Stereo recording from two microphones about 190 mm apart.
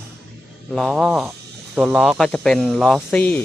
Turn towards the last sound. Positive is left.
turn(degrees=5)  # may be behind; listen again after turning